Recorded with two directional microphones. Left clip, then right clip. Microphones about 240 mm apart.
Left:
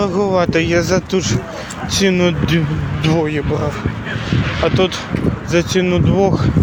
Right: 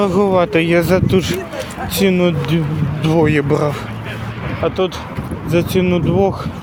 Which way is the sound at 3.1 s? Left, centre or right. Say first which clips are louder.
Right 7 dB; right.